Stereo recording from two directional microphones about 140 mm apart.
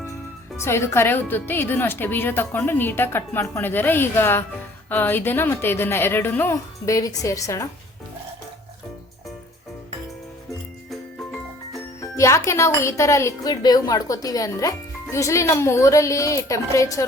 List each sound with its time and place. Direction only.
0.5 s a woman's voice: 20° left (ahead or behind)
12.1 s speech: 20° left (ahead or behind)